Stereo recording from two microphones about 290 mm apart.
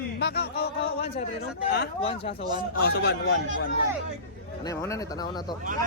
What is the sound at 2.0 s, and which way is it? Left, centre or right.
Speech, centre.